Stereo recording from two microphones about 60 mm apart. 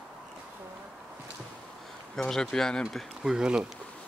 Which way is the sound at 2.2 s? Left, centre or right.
Centre.